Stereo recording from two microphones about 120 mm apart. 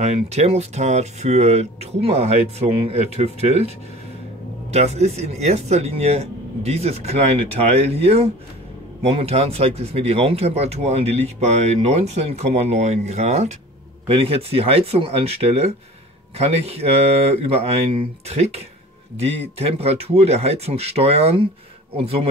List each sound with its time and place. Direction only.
0.0 s speech: 70° right (ahead or behind)
4.7 s speech: 65° right (ahead or behind)
14.0 s speech: 50° right (ahead or behind)
19.8 s speech: 60° right (ahead or behind)